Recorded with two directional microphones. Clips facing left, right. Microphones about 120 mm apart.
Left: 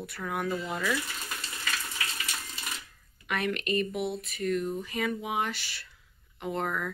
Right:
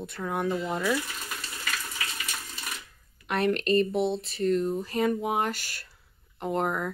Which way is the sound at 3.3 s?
35° right (ahead or behind).